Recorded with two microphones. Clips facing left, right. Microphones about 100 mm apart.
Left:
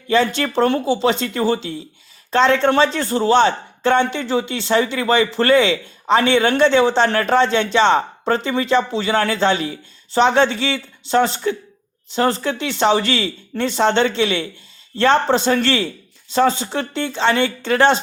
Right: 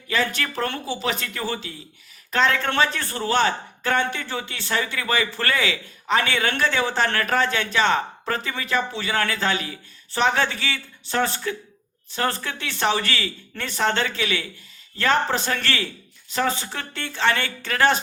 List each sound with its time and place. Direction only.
0.1 s speech: 25° left (ahead or behind)